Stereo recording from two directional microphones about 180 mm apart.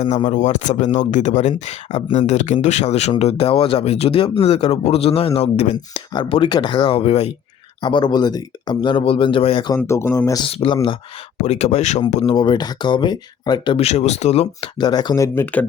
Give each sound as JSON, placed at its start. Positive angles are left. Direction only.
{"t": 0.0, "sound": "speech", "side_deg": 40}
{"t": 7.8, "sound": "speech", "side_deg": 25}
{"t": 10.4, "sound": "speech", "side_deg": 30}
{"t": 12.2, "sound": "speech", "side_deg": 25}
{"t": 14.8, "sound": "speech", "side_deg": 25}